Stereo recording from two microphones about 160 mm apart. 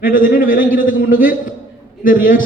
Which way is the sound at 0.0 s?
60° left (ahead or behind).